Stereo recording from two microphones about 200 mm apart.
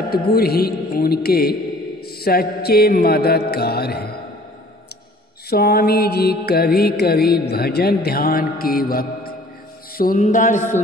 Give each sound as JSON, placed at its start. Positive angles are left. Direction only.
{"t": 0.1, "sound": "mantra", "side_deg": 50}
{"t": 5.5, "sound": "mantra", "side_deg": 50}
{"t": 9.9, "sound": "speech", "side_deg": 45}